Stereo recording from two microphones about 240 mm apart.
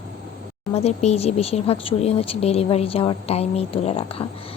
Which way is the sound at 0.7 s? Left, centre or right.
Left.